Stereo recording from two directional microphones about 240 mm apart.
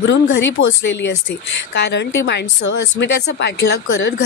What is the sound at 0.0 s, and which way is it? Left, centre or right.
A woman's voice, left.